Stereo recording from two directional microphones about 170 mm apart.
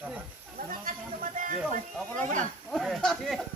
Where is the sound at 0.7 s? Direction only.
55° right (ahead or behind).